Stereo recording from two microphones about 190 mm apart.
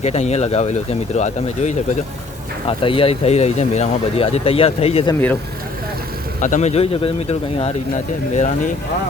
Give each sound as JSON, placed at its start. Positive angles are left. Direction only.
{"t": 0.0, "sound": "speech", "side_deg": 35}
{"t": 6.4, "sound": "speech", "side_deg": 40}